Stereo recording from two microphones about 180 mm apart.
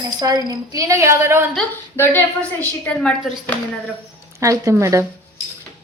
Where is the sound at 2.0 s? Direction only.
15° left (ahead or behind).